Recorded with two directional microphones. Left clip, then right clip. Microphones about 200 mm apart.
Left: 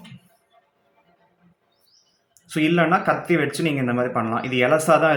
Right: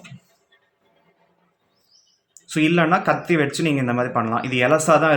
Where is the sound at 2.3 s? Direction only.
15° right (ahead or behind).